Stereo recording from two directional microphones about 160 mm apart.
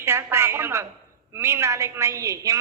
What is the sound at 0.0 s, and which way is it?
A woman's voice, 15° right (ahead or behind).